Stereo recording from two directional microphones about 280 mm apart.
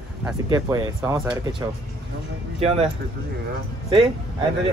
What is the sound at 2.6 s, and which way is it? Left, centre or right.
Speech, right.